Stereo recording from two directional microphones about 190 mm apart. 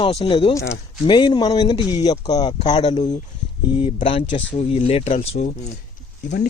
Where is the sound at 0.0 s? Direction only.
30° left (ahead or behind).